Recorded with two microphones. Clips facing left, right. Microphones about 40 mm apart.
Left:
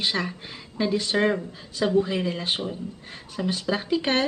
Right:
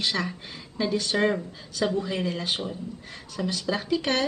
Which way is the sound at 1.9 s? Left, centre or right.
Left.